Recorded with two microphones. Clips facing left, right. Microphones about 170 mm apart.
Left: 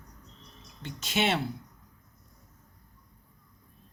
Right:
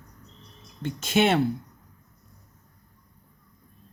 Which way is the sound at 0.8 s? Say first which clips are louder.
Right 7 dB; 50° right (ahead or behind).